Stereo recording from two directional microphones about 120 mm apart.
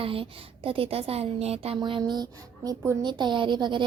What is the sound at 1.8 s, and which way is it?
A woman's voice, 40° right (ahead or behind).